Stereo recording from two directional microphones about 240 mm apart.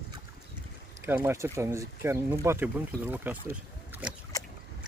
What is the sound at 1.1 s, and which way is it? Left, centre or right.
Speech, centre.